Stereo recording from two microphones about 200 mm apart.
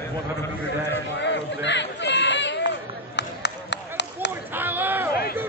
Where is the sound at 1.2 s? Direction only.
60° left (ahead or behind).